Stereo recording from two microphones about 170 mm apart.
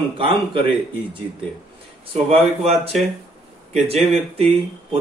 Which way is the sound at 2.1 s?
35° right (ahead or behind).